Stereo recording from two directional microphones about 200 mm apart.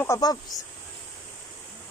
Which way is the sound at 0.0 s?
15° left (ahead or behind).